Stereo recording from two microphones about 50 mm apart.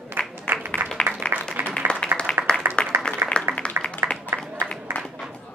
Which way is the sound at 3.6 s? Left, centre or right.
Left.